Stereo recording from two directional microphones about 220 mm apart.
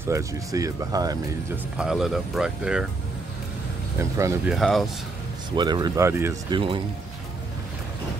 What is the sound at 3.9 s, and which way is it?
Speech, 15° right (ahead or behind).